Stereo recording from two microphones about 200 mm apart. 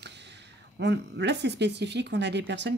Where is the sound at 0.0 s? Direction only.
60° right (ahead or behind).